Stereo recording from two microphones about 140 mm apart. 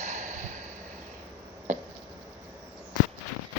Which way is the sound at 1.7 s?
60° right (ahead or behind).